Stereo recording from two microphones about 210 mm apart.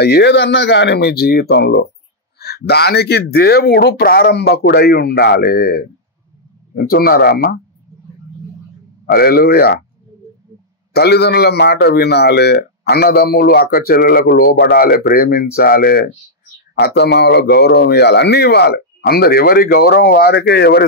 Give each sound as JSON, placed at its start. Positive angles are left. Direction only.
{"t": 0.0, "sound": "a man's voice", "side_deg": 50}
{"t": 9.0, "sound": "a man's voice", "side_deg": 45}
{"t": 10.9, "sound": "a man's voice", "side_deg": 50}